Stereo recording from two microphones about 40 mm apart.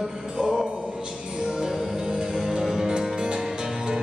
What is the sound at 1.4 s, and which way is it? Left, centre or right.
Music, centre.